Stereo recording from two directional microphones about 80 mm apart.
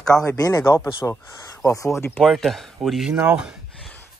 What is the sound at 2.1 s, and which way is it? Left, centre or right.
Speech, centre.